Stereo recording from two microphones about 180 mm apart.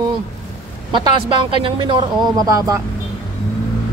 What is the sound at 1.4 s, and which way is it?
Speech, 30° right (ahead or behind).